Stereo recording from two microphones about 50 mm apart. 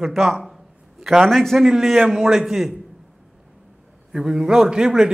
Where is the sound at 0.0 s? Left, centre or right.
Centre.